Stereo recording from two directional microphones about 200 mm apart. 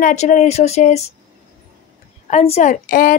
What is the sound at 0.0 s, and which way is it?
A woman's voice, 35° left (ahead or behind).